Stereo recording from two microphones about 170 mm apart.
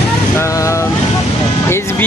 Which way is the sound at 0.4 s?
15° left (ahead or behind).